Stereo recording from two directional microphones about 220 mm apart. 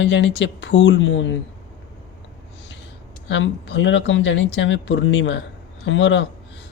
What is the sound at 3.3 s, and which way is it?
Speech, 55° left (ahead or behind).